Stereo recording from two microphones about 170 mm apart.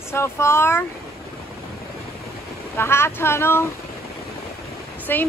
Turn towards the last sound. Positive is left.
turn(degrees=10)  # may be behind; listen again after turning